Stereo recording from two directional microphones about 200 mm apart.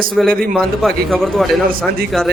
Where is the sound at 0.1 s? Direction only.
Centre (ahead or behind).